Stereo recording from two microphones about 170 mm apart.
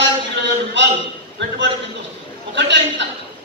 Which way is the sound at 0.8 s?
90° right.